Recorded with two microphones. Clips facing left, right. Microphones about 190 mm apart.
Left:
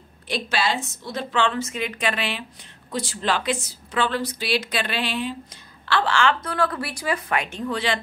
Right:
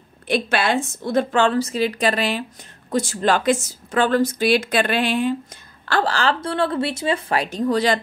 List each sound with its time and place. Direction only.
0.3 s a woman's voice: 55° right (ahead or behind); by 8.0 s 40° right (ahead or behind)